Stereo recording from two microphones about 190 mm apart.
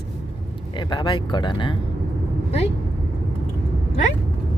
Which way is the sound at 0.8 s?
25° left (ahead or behind).